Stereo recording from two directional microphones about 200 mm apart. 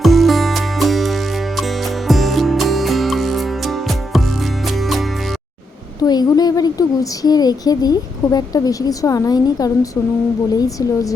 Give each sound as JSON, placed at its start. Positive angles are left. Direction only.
{"t": 0.0, "sound": "music", "side_deg": 0}
{"t": 6.0, "sound": "a woman's voice", "side_deg": 20}